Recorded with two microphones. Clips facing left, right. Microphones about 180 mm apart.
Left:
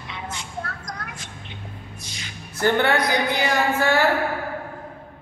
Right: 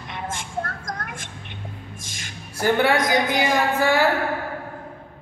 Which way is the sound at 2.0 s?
45° right (ahead or behind).